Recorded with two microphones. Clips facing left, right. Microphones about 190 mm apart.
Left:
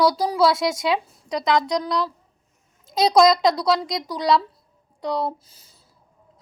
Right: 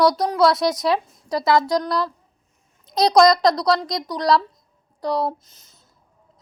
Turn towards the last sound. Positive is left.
turn(degrees=10)  # may be behind; listen again after turning